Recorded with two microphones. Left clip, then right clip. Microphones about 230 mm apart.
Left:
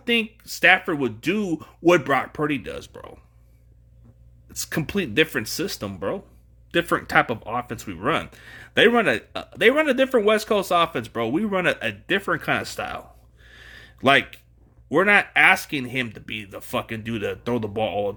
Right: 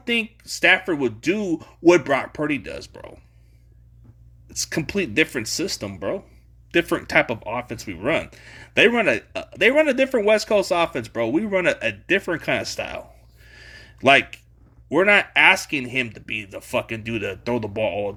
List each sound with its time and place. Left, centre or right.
0.0 s speech: centre
4.8 s speech: centre
13.6 s a sound: centre
15.0 s speech: centre